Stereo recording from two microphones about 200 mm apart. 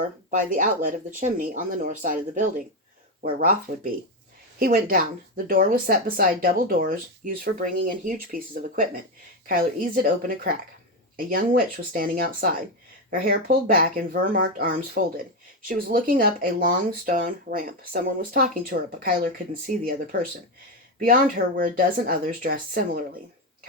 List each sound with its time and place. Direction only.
0.3 s speech: 40° right (ahead or behind)
4.6 s speech: 45° right (ahead or behind)